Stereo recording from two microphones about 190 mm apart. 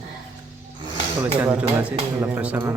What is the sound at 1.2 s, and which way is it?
Speech, 10° right (ahead or behind).